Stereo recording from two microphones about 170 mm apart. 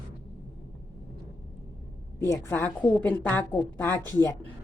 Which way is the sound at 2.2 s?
15° left (ahead or behind).